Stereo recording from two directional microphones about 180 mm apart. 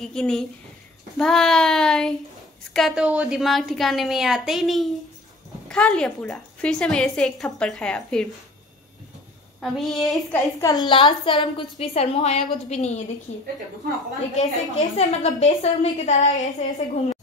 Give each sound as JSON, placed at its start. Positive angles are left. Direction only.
{"t": 0.0, "sound": "a woman's voice", "side_deg": 5}
{"t": 9.6, "sound": "a woman's voice", "side_deg": 0}
{"t": 10.6, "sound": "a woman's voice", "side_deg": 20}